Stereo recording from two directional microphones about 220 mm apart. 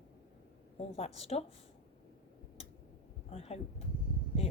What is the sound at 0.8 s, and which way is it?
Speech, 30° left (ahead or behind).